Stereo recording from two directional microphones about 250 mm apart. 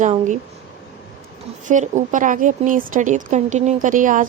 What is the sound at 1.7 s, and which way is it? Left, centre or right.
A woman's voice, right.